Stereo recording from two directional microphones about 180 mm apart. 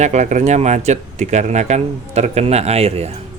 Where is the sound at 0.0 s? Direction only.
40° right (ahead or behind).